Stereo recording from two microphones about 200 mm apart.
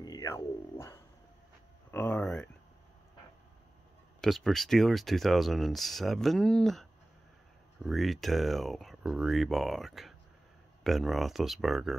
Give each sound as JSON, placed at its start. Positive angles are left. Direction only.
{"t": 0.0, "sound": "speech", "side_deg": 20}
{"t": 4.2, "sound": "speech", "side_deg": 0}